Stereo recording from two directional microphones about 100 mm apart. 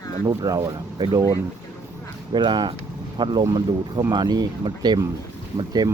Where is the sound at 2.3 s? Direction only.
50° right (ahead or behind).